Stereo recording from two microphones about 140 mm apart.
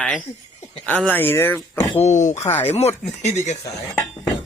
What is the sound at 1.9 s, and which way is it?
Speech, 55° left (ahead or behind).